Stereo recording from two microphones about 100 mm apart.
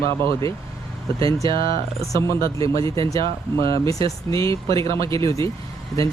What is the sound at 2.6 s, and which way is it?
Speech, 65° right (ahead or behind).